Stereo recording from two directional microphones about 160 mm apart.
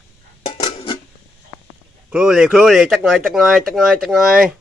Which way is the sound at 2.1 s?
5° right (ahead or behind).